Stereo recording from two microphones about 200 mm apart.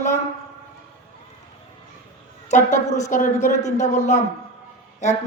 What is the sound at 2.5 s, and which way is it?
A woman's voice, 35° left (ahead or behind).